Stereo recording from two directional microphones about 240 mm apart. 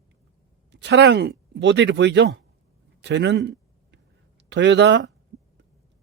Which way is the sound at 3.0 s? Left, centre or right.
Right.